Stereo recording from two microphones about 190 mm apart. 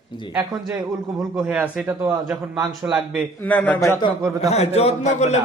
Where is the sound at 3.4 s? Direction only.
10° left (ahead or behind).